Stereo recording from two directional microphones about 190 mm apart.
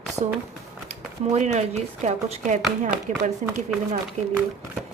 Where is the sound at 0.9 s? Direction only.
35° right (ahead or behind).